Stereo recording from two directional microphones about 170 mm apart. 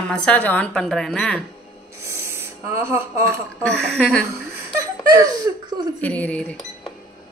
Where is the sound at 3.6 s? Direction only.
5° left (ahead or behind).